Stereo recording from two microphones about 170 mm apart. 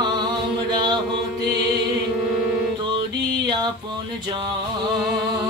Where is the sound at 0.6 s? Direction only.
25° right (ahead or behind).